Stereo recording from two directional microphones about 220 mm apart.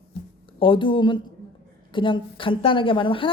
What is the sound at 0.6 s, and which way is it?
Speech, 20° left (ahead or behind).